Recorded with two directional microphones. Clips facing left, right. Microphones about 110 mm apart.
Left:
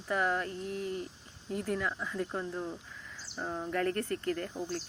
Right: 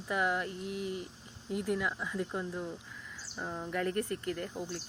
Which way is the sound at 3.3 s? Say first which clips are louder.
Left 2 dB; 10° left (ahead or behind).